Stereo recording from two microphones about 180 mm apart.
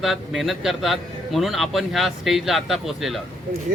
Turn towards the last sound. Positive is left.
turn(degrees=0)  # may be behind; listen again after turning